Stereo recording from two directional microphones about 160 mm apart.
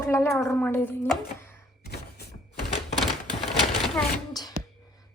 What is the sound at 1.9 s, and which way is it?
Thunk, 90° left.